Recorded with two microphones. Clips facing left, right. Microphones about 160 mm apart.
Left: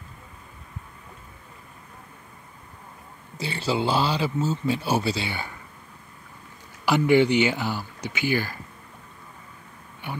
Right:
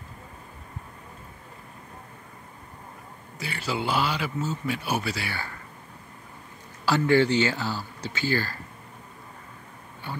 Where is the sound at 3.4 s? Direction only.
30° left (ahead or behind).